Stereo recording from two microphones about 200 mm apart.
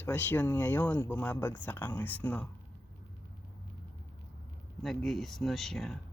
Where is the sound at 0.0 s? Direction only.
10° left (ahead or behind).